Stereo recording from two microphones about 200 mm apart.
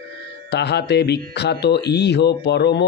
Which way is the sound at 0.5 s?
55° left (ahead or behind).